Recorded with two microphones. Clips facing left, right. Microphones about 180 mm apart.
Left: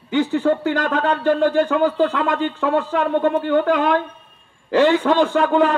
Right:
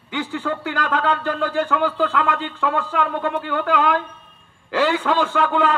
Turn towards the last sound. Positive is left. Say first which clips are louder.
# left 3 dB
turn(degrees=45)  # may be behind; listen again after turning